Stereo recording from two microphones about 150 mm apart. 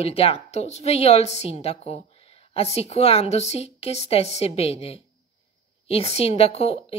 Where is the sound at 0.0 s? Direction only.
40° left (ahead or behind).